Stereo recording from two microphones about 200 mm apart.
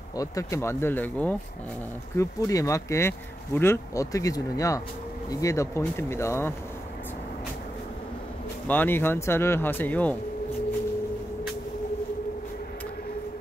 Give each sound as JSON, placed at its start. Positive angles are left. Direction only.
{"t": 0.2, "sound": "speech", "side_deg": 15}
{"t": 8.6, "sound": "speech", "side_deg": 10}